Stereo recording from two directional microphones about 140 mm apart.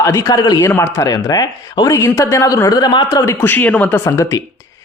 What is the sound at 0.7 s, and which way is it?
Speech, 15° left (ahead or behind).